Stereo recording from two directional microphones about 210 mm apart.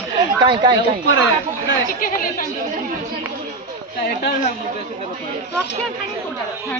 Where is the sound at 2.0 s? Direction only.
40° left (ahead or behind).